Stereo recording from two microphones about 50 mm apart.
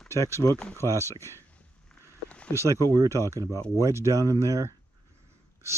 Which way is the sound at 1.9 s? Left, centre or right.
Left.